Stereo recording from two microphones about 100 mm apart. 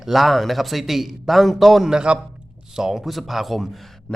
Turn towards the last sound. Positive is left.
turn(degrees=0)  # may be behind; listen again after turning